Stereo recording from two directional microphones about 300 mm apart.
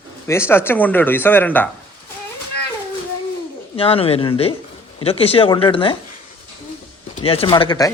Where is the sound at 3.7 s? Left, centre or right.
Centre.